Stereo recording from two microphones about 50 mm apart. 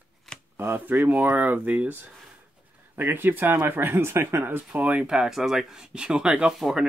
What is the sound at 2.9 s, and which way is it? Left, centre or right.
Speech, right.